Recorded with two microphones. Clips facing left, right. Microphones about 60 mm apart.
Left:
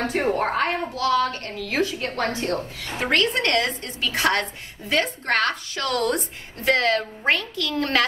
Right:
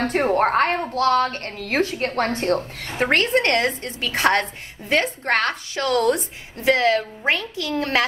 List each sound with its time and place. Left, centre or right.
0.0 s a woman's voice: right
5.9 s a woman's voice: left